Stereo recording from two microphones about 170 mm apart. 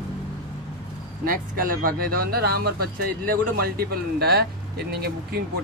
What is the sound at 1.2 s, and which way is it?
Speech, 55° right (ahead or behind).